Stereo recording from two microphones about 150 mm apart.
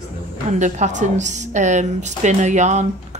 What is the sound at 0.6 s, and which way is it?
A woman's voice, 55° right (ahead or behind).